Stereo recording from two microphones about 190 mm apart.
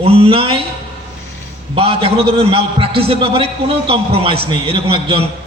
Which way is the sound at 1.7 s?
30° right (ahead or behind).